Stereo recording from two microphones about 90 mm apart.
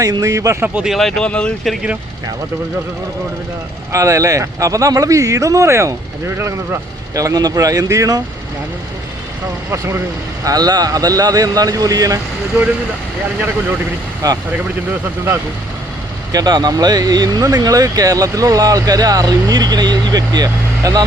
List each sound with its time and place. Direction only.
0.0 s speech: 40° right (ahead or behind)
0.9 s speech: 5° left (ahead or behind)
3.9 s speech: 35° right (ahead or behind)
9.7 s speech: 35° right (ahead or behind)
10.4 s speech: 45° right (ahead or behind)
14.2 s speech: 40° right (ahead or behind)
16.3 s speech: 45° right (ahead or behind)